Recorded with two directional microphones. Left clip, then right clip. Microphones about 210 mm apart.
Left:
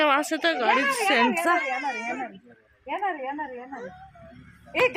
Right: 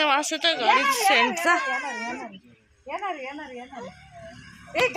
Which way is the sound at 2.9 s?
Centre (ahead or behind).